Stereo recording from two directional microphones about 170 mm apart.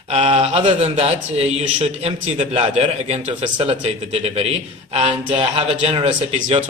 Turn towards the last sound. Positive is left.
turn(degrees=-40)  # may be behind; listen again after turning